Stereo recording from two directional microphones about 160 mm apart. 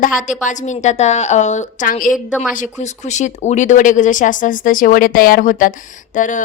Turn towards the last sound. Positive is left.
turn(degrees=55)  # may be behind; listen again after turning